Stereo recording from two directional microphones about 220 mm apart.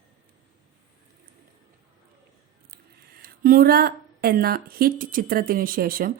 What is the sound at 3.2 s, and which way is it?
Speech, 40° right (ahead or behind).